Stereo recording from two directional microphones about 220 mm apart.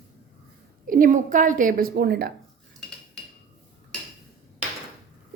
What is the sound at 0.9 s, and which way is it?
A woman's voice, 35° right (ahead or behind).